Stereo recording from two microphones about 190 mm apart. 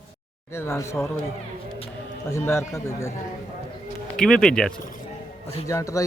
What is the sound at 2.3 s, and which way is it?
Speech, 15° left (ahead or behind).